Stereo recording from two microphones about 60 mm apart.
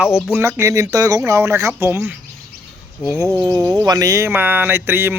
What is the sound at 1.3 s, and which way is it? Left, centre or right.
Speech, right.